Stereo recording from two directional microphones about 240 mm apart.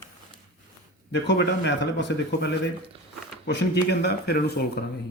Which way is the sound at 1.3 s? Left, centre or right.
Left.